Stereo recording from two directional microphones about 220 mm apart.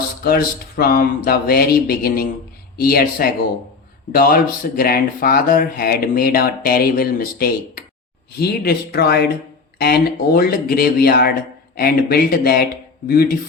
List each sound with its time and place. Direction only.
0.2 s speech: 45° left (ahead or behind)